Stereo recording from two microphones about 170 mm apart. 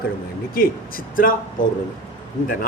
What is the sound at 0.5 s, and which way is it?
Speech, 55° left (ahead or behind).